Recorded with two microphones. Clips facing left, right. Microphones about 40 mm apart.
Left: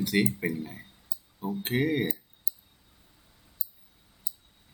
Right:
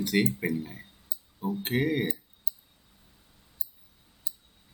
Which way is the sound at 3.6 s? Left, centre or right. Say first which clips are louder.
Right 1 dB; right.